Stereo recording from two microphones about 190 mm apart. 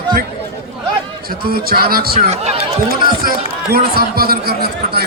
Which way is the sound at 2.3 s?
35° right (ahead or behind).